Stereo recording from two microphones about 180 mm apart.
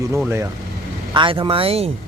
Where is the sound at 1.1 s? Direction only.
30° right (ahead or behind).